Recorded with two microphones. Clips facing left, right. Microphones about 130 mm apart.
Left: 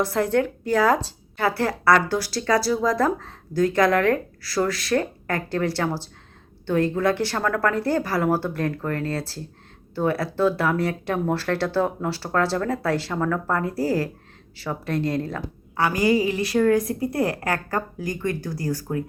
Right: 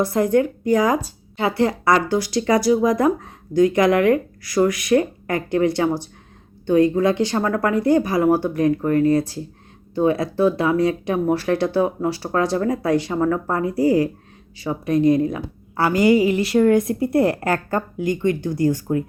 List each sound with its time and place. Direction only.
0.0 s speech: 15° right (ahead or behind)
15.7 s a woman's voice: 25° right (ahead or behind)